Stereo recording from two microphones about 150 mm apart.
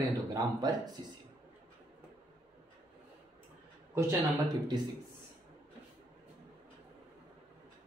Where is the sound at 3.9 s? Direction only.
20° right (ahead or behind).